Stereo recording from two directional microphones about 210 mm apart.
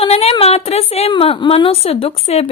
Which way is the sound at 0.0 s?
30° left (ahead or behind).